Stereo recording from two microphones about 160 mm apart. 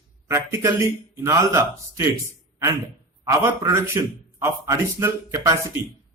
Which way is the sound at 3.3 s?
20° right (ahead or behind).